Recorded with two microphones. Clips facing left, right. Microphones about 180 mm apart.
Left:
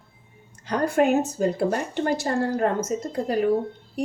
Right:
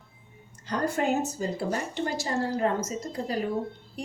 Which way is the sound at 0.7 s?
65° left (ahead or behind).